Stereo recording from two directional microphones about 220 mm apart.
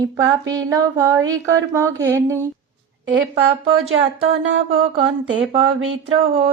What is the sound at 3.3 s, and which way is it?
Speech, 25° right (ahead or behind).